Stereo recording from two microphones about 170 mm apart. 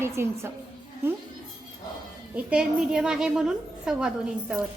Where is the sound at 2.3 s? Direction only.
5° right (ahead or behind).